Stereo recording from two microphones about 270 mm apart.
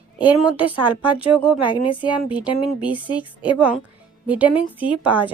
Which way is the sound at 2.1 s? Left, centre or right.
Centre.